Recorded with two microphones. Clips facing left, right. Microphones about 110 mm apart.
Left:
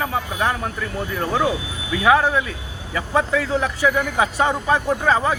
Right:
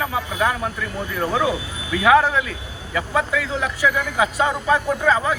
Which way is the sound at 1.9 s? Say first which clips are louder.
Right 1 dB; 25° left (ahead or behind).